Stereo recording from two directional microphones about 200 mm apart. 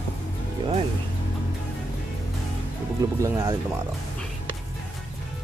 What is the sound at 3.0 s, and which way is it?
Speech, 15° right (ahead or behind).